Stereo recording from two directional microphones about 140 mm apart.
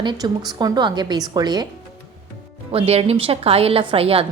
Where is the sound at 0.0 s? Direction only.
30° right (ahead or behind).